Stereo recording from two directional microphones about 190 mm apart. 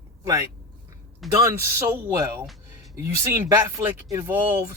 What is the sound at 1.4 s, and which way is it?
Speech, 15° right (ahead or behind).